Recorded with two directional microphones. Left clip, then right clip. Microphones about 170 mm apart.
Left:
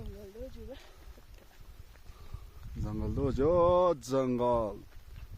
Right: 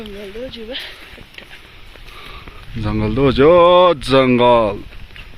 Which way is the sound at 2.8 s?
Centre (ahead or behind).